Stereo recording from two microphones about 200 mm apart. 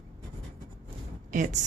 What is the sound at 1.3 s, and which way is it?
Speech, 40° right (ahead or behind).